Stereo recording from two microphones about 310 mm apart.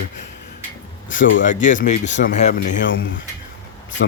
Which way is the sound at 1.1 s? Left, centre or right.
Left.